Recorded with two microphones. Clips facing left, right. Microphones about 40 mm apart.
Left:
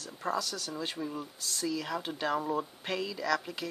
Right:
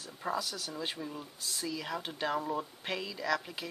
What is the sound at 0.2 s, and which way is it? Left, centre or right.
Speech, centre.